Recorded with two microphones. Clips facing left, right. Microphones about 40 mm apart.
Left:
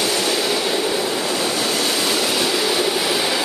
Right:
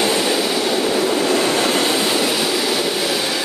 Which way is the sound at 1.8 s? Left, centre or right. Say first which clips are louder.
Right 3 dB; centre.